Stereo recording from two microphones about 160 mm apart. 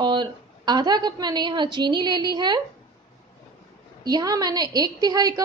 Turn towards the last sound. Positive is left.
turn(degrees=-25)  # may be behind; listen again after turning